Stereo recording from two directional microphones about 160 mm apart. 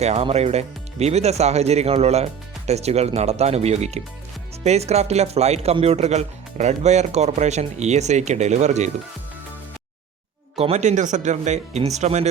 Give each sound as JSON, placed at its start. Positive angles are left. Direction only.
{"t": 0.0, "sound": "speech", "side_deg": -40}
{"t": 10.5, "sound": "speech", "side_deg": -40}